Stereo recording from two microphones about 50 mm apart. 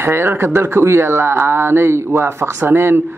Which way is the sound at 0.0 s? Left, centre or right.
Right.